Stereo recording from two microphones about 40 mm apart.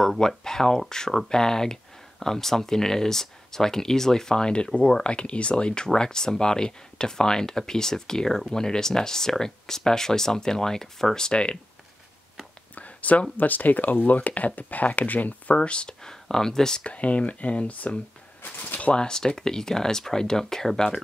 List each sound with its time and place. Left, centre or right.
0.4 s speech: centre
11.2 s speech: left
12.7 s a sound: left
13.4 s speech: left
15.5 s speech: left
16.8 s speech: left
18.4 s a sound: left
18.9 s speech: centre